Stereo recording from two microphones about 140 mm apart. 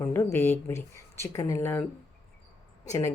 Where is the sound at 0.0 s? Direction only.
15° left (ahead or behind).